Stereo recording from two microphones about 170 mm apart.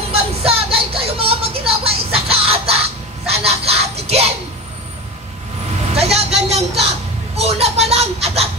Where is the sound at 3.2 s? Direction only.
35° right (ahead or behind).